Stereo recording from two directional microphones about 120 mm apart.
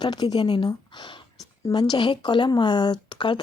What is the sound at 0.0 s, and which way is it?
Speech, 35° left (ahead or behind).